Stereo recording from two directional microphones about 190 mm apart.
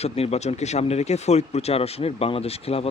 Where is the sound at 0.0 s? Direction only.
35° left (ahead or behind).